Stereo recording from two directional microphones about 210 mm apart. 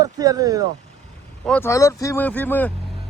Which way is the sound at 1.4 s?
10° left (ahead or behind).